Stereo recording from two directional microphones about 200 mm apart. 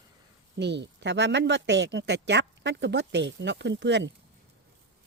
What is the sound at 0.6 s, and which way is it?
Speech, 60° right (ahead or behind).